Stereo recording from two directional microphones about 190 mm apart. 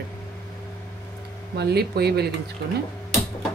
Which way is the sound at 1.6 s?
60° right (ahead or behind).